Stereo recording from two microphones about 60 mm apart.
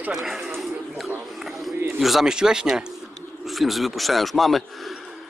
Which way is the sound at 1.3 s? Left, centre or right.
Centre.